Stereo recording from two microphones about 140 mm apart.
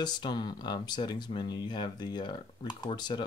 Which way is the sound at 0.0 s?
30° left (ahead or behind).